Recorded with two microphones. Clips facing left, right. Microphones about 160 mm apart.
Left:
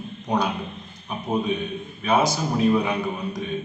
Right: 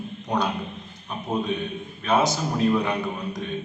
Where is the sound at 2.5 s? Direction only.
5° left (ahead or behind).